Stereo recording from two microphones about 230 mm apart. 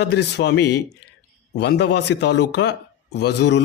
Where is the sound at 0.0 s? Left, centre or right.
Left.